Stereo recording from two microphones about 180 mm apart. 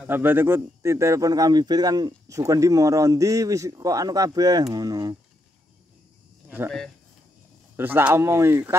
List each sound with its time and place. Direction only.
0.0 s speech: 10° right (ahead or behind)
7.7 s speech: 10° right (ahead or behind)